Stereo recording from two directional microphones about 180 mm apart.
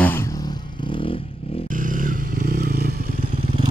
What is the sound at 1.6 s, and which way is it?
Motorcycle, 45° right (ahead or behind).